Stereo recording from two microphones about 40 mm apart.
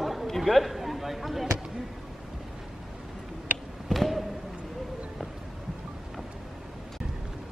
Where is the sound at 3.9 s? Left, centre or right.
Centre.